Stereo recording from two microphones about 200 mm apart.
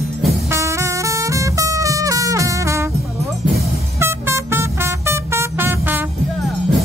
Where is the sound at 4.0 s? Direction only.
10° right (ahead or behind).